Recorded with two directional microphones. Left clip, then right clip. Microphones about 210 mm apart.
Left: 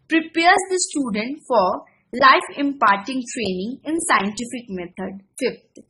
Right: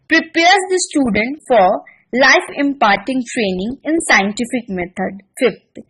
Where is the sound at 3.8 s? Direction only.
15° right (ahead or behind).